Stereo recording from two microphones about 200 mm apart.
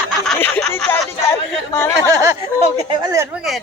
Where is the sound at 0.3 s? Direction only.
10° left (ahead or behind).